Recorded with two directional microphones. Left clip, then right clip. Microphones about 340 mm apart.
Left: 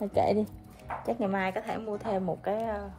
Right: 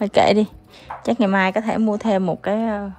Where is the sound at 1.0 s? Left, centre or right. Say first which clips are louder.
Right 12 dB; right.